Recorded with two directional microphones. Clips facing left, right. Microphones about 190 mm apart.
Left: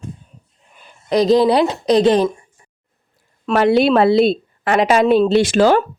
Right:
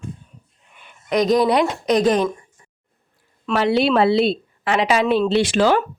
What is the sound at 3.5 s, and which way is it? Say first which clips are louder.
A woman's voice: left 4 dB; 50° left (ahead or behind).